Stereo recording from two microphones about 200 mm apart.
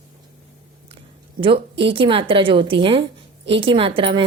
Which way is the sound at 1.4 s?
25° right (ahead or behind).